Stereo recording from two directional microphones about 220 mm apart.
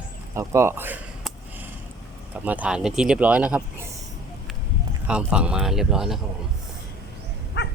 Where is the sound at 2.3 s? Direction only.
5° right (ahead or behind).